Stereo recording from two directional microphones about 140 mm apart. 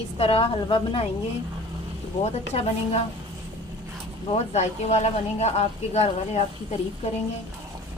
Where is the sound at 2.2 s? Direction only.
50° left (ahead or behind).